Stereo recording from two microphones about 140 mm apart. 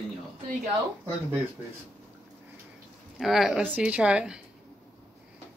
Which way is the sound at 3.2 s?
Centre (ahead or behind).